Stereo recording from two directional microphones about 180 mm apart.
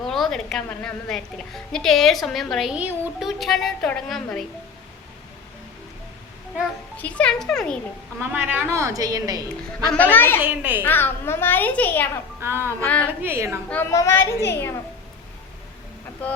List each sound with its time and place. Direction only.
0.1 s a woman's voice: 5° left (ahead or behind)
6.9 s a woman's voice: 10° left (ahead or behind)
8.2 s a woman's voice: 10° right (ahead or behind)
9.9 s a child's voice: 10° left (ahead or behind)
10.4 s a woman's voice: 10° right (ahead or behind)
10.8 s a child's voice: 10° left (ahead or behind)
12.4 s a woman's voice: 15° right (ahead or behind)
12.8 s a child's voice: 5° left (ahead or behind)
13.1 s a woman's voice: 15° right (ahead or behind)
13.7 s a child's voice: 15° left (ahead or behind)
16.2 s a child's voice: 10° left (ahead or behind)